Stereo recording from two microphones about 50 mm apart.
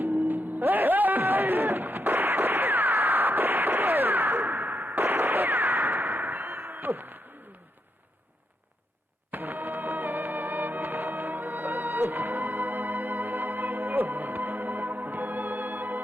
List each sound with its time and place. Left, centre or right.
0.0 s music: right
1.9 s a sound: right
6.1 s a sound: right
9.3 s music: right
10.8 s music: right
15.5 s music: right